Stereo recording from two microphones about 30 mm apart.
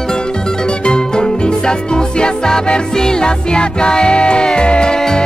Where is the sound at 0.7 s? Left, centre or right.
Left.